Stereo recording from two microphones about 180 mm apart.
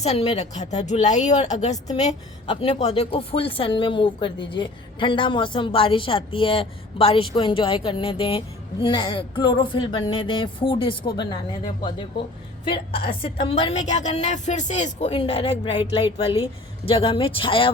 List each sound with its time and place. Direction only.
0.0 s a woman's voice: 35° left (ahead or behind)